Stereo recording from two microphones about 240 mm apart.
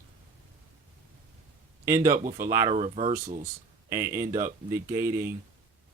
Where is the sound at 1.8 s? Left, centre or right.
Centre.